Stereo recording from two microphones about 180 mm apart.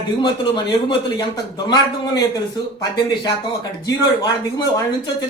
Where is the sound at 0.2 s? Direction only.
25° left (ahead or behind).